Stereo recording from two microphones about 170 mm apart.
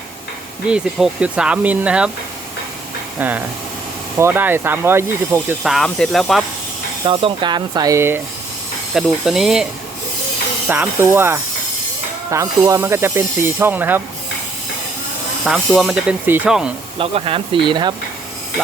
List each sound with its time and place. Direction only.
0.7 s speech: 5° right (ahead or behind)
3.2 s speech: 10° right (ahead or behind)
5.6 s speech: centre (ahead or behind)
7.0 s speech: 30° right (ahead or behind); by 8.2 s 15° right (ahead or behind)
9.0 s speech: centre (ahead or behind)
10.7 s speech: 10° right (ahead or behind)
15.4 s speech: centre (ahead or behind)
17.0 s speech: 35° right (ahead or behind)